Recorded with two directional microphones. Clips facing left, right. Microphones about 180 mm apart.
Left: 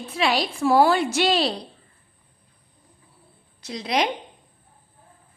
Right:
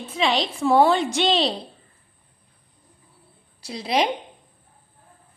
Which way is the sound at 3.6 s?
30° right (ahead or behind).